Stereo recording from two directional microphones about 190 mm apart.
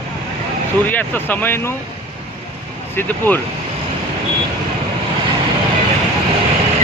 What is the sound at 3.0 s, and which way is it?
Speech, 10° left (ahead or behind).